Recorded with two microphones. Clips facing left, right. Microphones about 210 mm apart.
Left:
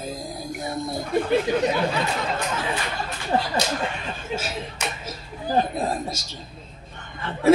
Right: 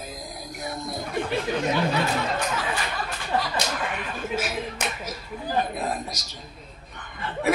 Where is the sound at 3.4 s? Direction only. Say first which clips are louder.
Left 1 dB; 30° left (ahead or behind).